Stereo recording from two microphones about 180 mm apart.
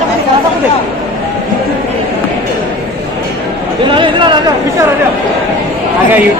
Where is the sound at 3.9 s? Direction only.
30° right (ahead or behind).